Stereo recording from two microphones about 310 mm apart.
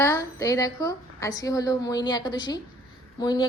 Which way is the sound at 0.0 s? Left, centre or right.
Centre.